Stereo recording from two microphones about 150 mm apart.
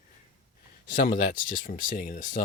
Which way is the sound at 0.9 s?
70° left (ahead or behind).